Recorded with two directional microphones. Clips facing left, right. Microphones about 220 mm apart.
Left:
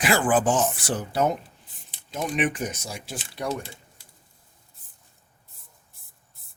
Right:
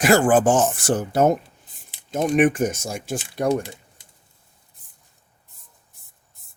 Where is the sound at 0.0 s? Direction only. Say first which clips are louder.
Right 6 dB; 45° right (ahead or behind).